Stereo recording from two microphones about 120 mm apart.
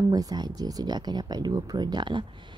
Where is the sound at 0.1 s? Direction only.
35° right (ahead or behind).